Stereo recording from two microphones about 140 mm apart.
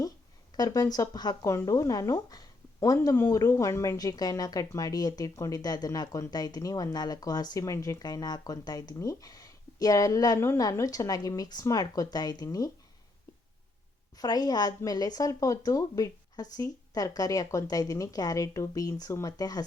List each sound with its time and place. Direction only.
0.5 s speech: 25° left (ahead or behind)
14.2 s speech: 30° left (ahead or behind)